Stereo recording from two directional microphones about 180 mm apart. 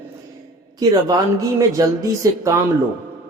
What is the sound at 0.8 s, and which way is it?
Speech, 20° right (ahead or behind).